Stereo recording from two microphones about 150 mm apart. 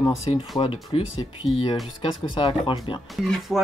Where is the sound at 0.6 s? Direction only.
40° left (ahead or behind).